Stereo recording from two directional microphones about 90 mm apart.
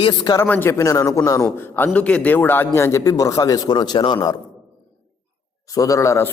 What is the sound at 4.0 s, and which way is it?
Speech, 75° left (ahead or behind).